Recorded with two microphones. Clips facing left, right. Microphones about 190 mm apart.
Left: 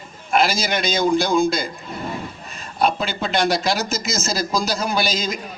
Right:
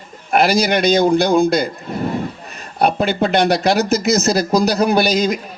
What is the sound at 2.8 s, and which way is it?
Speech, 60° right (ahead or behind).